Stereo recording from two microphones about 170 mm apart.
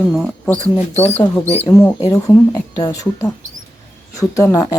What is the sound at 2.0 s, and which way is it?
A woman's voice, 20° left (ahead or behind).